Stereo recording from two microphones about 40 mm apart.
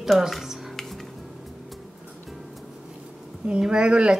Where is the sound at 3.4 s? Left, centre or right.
Right.